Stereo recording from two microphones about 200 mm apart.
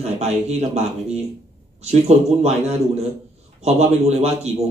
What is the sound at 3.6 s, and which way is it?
Speech, 35° right (ahead or behind).